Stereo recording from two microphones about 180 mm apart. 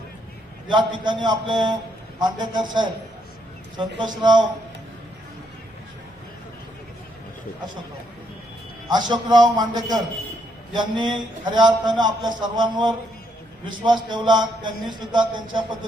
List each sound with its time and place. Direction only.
0.7 s a man's voice: 25° right (ahead or behind)
8.9 s a man's voice: 25° right (ahead or behind)